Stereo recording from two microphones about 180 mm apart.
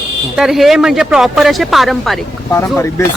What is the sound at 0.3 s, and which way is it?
Speech, centre (ahead or behind).